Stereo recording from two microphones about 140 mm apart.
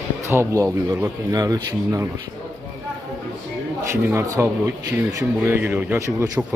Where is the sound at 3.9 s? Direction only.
20° right (ahead or behind).